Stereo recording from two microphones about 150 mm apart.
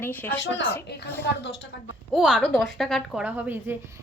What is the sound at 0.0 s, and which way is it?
Speech, 15° left (ahead or behind).